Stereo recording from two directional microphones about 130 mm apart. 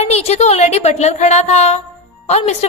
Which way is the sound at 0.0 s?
55° left (ahead or behind).